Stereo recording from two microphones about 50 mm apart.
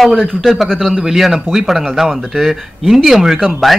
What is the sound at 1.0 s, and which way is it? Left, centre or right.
Speech, centre.